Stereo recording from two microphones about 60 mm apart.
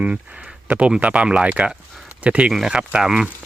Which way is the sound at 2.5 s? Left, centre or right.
Centre.